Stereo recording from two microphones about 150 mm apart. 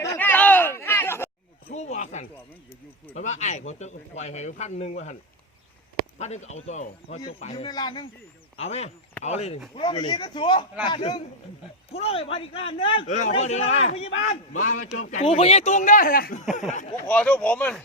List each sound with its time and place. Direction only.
0.0 s chatter: 15° left (ahead or behind)
1.7 s a sound: 50° left (ahead or behind)
3.2 s speech: 50° left (ahead or behind)
6.1 s speech: 50° left (ahead or behind)
7.4 s speech: 40° left (ahead or behind)
8.5 s speech: 45° left (ahead or behind)
9.7 s speech: 35° left (ahead or behind)
13.1 s speech: 50° left (ahead or behind)
15.1 s speech: 45° left (ahead or behind); by 16.4 s 75° left (ahead or behind)
16.4 s speech: 50° left (ahead or behind)
17.1 s speech: 10° left (ahead or behind)